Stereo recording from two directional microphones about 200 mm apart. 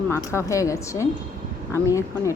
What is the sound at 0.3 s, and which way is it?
Speech, 15° left (ahead or behind).